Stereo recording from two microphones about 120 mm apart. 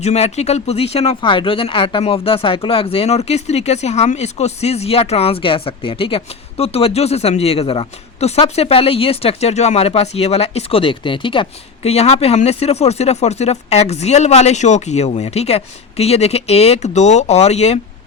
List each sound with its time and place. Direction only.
0.0 s speech: 65° left (ahead or behind)